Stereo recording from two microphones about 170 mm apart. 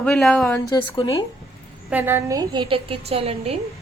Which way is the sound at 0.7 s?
20° left (ahead or behind).